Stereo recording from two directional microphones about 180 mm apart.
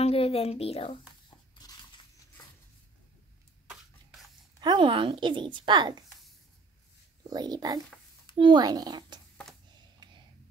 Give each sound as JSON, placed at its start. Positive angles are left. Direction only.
{"t": 0.0, "sound": "a woman's voice", "side_deg": 35}
{"t": 1.5, "sound": "biting", "side_deg": 25}
{"t": 4.6, "sound": "speech", "side_deg": -25}
{"t": 7.2, "sound": "speech", "side_deg": -20}